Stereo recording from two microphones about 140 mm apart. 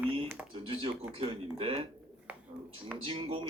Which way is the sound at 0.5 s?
40° right (ahead or behind).